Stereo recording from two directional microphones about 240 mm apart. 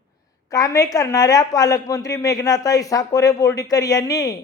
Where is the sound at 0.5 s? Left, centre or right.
Centre.